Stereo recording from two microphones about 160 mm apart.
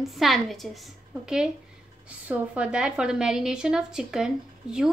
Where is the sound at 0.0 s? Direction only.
Centre (ahead or behind).